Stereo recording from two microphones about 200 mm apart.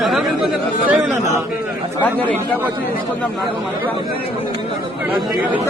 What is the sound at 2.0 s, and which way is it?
Speech, 10° left (ahead or behind).